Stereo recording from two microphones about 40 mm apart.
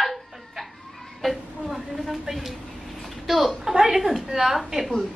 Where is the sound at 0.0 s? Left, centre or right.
Centre.